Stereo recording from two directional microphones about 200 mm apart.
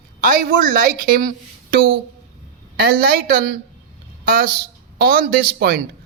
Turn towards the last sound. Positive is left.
turn(degrees=-50)  # may be behind; listen again after turning